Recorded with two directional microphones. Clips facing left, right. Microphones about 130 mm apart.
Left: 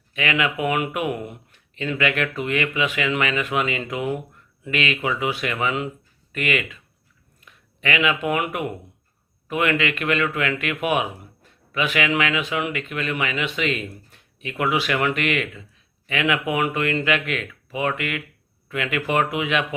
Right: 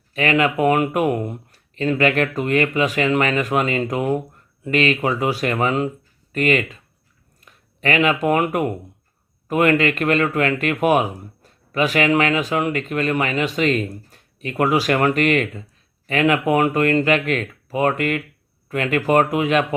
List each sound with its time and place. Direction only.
0.1 s speech: 40° right (ahead or behind)